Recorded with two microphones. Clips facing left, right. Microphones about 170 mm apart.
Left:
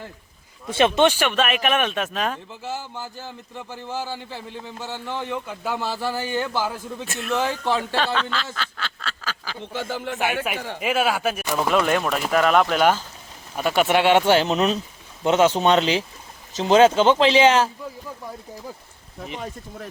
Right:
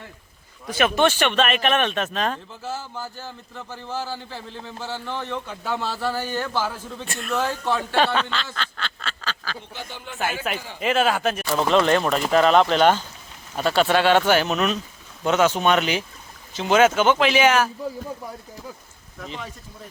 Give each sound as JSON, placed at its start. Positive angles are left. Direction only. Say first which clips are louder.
{"t": 0.7, "sound": "speech", "louder": "left 2 dB", "side_deg": 25}
{"t": 7.9, "sound": "speech", "louder": "right 2 dB", "side_deg": -15}
{"t": 8.3, "sound": "duck", "louder": "left 1 dB", "side_deg": 5}
{"t": 9.7, "sound": "speech", "louder": "left 7 dB", "side_deg": 90}
{"t": 10.8, "sound": "speech", "louder": "right 2 dB", "side_deg": 10}